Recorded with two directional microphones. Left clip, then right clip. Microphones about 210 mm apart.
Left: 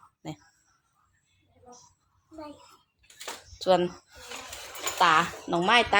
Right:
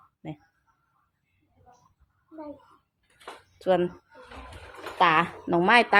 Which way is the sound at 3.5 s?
5° right (ahead or behind).